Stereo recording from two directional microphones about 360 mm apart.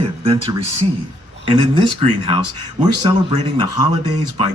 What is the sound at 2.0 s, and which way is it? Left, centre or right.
Speech, right.